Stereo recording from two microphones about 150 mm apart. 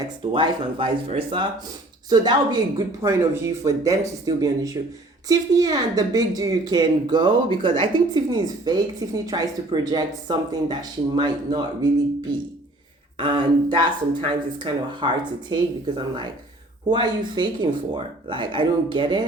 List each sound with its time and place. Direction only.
0.3 s speech: 35° right (ahead or behind)
13.1 s speech: 35° right (ahead or behind)